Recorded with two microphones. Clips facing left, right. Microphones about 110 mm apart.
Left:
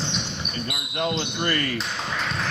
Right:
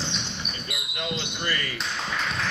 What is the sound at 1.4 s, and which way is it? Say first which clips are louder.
Speech: left 5 dB; 60° left (ahead or behind).